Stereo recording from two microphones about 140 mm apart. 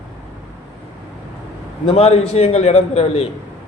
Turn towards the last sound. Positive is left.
turn(degrees=45)  # may be behind; listen again after turning